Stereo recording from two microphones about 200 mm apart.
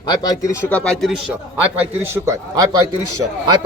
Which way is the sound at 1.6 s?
10° right (ahead or behind).